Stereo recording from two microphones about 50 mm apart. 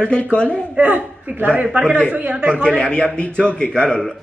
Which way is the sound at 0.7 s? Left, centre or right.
Right.